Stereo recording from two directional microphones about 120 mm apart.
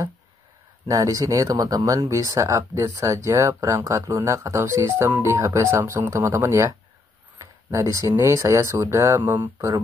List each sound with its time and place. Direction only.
0.8 s speech: 30° right (ahead or behind)